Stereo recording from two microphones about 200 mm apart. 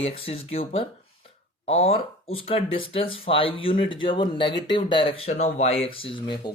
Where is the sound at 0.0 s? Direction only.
30° left (ahead or behind).